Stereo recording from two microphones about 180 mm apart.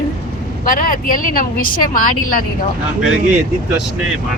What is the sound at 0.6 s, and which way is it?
Speech, 50° left (ahead or behind).